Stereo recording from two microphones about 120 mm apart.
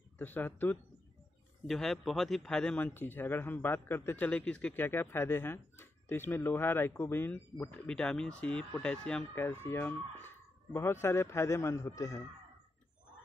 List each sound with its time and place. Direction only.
0.2 s a man's voice: 15° left (ahead or behind)
1.7 s a man's voice: centre (ahead or behind)
9.3 s speech: 20° left (ahead or behind)